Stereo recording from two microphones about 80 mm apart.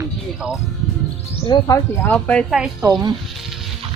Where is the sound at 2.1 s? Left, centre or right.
Centre.